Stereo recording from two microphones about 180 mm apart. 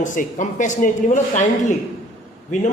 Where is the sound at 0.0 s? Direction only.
45° left (ahead or behind).